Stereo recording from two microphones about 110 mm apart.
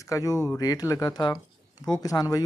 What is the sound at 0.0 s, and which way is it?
Speech, 30° left (ahead or behind).